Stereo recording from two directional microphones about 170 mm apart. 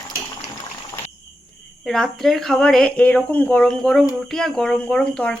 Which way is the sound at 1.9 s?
Centre (ahead or behind).